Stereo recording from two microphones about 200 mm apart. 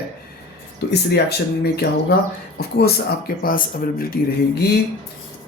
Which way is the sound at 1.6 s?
50° left (ahead or behind).